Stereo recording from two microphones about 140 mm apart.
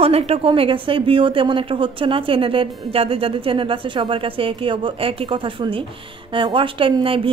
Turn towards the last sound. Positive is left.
turn(degrees=-40)  # may be behind; listen again after turning